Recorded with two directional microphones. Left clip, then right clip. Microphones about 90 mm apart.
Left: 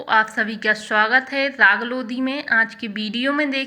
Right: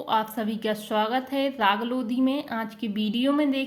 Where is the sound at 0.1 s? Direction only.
30° right (ahead or behind).